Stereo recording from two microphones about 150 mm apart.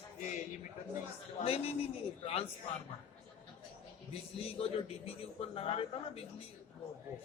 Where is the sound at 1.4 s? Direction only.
40° left (ahead or behind).